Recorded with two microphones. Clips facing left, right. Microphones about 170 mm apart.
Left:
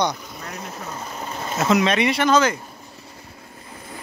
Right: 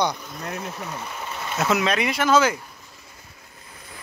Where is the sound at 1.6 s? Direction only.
Centre (ahead or behind).